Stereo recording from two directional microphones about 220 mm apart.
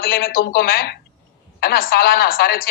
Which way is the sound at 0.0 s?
40° left (ahead or behind).